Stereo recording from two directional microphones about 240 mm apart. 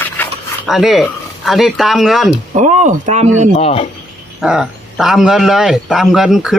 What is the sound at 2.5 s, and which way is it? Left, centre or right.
Speech, right.